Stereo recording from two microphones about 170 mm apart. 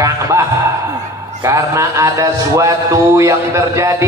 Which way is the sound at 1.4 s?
15° right (ahead or behind).